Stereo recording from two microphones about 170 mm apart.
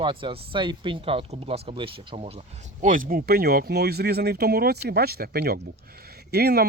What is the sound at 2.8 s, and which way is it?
Speech, 50° right (ahead or behind).